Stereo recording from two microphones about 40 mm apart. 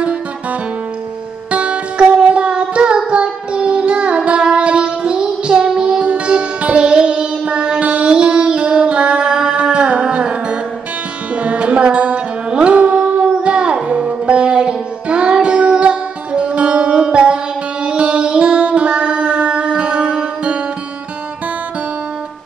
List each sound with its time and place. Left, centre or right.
0.0 s music: right
12.4 s carnatic music: right
13.8 s music: right